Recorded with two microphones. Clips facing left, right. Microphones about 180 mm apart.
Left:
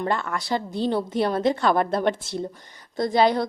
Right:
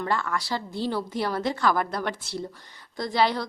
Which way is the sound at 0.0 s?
25° left (ahead or behind).